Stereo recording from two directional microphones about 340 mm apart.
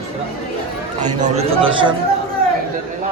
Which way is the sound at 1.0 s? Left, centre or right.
Right.